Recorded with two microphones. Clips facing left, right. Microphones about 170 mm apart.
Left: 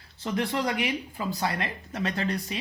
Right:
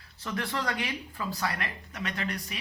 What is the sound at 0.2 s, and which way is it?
Speech, 20° left (ahead or behind).